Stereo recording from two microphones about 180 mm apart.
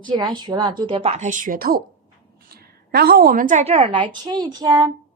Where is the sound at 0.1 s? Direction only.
25° right (ahead or behind).